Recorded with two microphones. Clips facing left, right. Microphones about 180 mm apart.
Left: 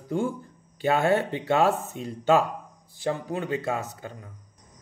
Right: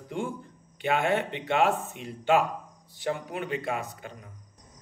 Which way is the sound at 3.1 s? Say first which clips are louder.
Left 3 dB; 25° left (ahead or behind).